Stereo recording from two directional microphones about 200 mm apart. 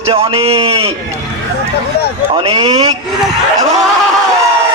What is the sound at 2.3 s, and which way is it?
Speech, 25° right (ahead or behind).